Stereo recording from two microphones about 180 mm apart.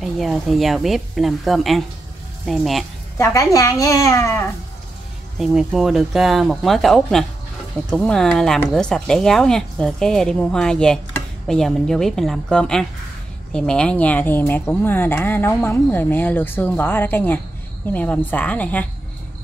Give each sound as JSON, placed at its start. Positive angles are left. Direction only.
{"t": 0.0, "sound": "speech", "side_deg": 0}
{"t": 3.8, "sound": "speech", "side_deg": 20}
{"t": 5.4, "sound": "speech", "side_deg": -5}